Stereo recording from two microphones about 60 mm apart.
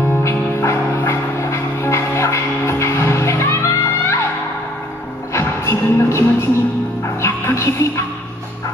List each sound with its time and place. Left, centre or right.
0.2 s music: left
5.3 s music: left